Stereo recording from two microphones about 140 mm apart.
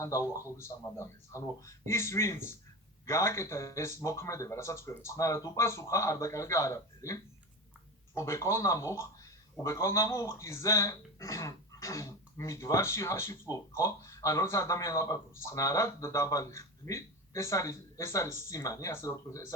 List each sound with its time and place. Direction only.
0.0 s speech: 20° left (ahead or behind)